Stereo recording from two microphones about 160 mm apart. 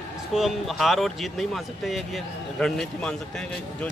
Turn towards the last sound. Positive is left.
turn(degrees=5)  # may be behind; listen again after turning